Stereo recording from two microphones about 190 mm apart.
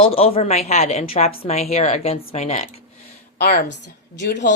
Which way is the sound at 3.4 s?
55° left (ahead or behind).